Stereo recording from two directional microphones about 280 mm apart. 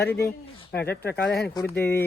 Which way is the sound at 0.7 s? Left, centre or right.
Left.